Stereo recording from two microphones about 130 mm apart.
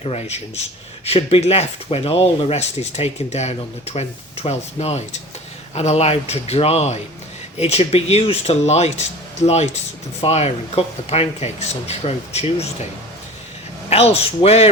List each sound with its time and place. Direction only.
0.0 s speech: 55° left (ahead or behind)
13.9 s speech: 50° left (ahead or behind)